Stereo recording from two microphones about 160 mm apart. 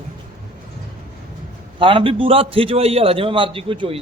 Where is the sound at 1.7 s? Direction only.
35° right (ahead or behind).